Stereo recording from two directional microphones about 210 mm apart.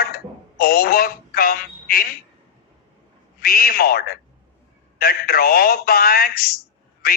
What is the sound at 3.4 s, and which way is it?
A man's voice, 45° left (ahead or behind).